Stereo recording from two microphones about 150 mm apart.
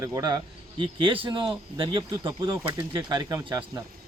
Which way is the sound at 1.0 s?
35° right (ahead or behind).